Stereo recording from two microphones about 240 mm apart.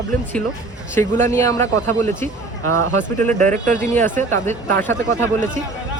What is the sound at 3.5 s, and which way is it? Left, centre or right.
Speech, right.